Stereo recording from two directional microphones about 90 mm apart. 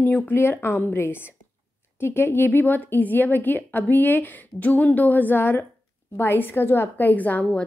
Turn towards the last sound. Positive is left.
turn(degrees=20)  # may be behind; listen again after turning